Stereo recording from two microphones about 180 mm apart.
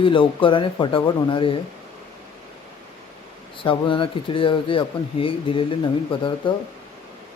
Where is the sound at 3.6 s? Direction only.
30° left (ahead or behind).